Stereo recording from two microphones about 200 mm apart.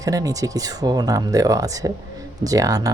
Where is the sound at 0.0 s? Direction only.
15° right (ahead or behind).